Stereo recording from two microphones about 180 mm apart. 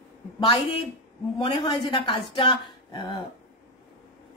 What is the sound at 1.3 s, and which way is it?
A woman's voice, 30° left (ahead or behind).